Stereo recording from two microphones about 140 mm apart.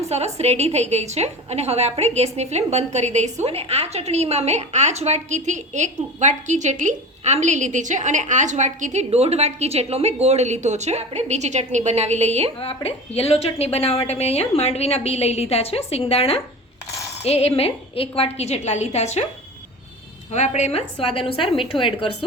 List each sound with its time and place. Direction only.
0.3 s a woman's voice: 50° right (ahead or behind)
12.5 s a woman's voice: 45° left (ahead or behind)
20.3 s a woman's voice: 55° left (ahead or behind); by 22.1 s 40° left (ahead or behind)